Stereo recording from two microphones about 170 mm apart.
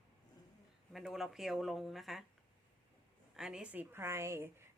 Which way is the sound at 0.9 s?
Centre (ahead or behind).